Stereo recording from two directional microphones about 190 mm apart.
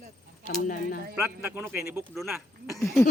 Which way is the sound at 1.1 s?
10° right (ahead or behind).